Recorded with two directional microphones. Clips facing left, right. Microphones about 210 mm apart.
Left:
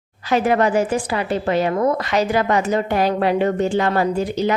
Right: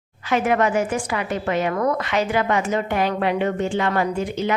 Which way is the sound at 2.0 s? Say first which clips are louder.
Left 3 dB; 40° left (ahead or behind).